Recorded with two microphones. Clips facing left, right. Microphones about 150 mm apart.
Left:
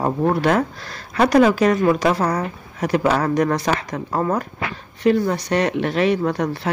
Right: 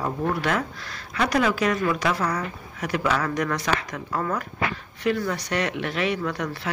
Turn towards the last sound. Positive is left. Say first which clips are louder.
# left 7 dB
turn(degrees=35)  # may be behind; listen again after turning